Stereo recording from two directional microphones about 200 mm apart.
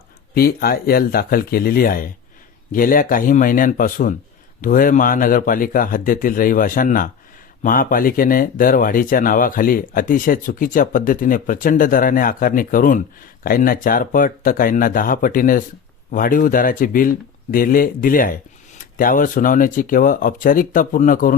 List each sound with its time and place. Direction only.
0.3 s speech: 50° left (ahead or behind)